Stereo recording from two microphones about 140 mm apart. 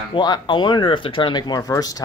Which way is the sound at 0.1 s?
30° left (ahead or behind).